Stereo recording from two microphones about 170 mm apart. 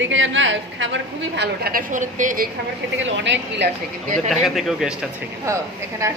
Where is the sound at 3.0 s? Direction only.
90° right.